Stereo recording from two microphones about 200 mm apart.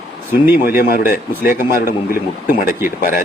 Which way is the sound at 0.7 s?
45° left (ahead or behind).